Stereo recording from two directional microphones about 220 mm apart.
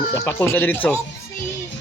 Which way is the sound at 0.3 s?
10° left (ahead or behind).